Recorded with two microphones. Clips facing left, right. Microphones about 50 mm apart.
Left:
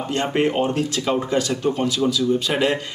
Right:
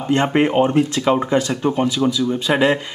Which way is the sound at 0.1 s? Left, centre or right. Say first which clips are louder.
Right 5 dB; right.